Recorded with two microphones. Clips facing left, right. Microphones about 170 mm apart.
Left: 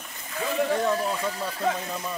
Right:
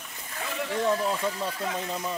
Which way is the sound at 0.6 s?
45° left (ahead or behind).